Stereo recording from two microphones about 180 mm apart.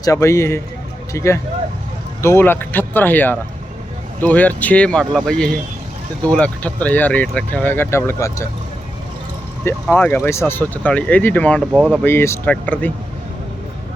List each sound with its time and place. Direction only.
0.0 s speech: 15° left (ahead or behind)
9.9 s speech: 10° left (ahead or behind)